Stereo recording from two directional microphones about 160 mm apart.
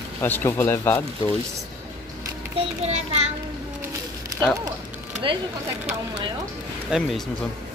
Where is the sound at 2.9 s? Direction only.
45° right (ahead or behind).